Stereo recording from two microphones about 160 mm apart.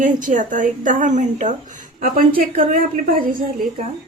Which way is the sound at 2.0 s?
65° right (ahead or behind).